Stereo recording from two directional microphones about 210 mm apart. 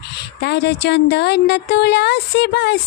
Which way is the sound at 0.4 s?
55° left (ahead or behind).